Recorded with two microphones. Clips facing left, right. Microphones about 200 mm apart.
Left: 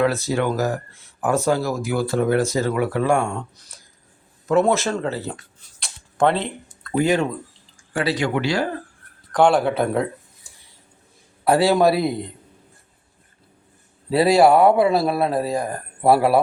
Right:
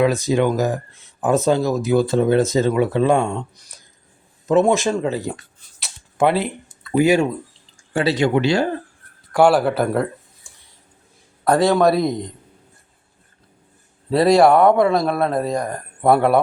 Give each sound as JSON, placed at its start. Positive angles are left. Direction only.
{"t": 0.0, "sound": "speech", "side_deg": -15}
{"t": 5.8, "sound": "a sound", "side_deg": -10}
{"t": 7.9, "sound": "speech", "side_deg": -25}
{"t": 9.3, "sound": "speech", "side_deg": -5}
{"t": 11.4, "sound": "a man's voice", "side_deg": 5}
{"t": 14.1, "sound": "speech", "side_deg": 5}